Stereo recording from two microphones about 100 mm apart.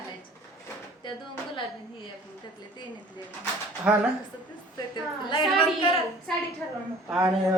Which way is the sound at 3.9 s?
10° right (ahead or behind).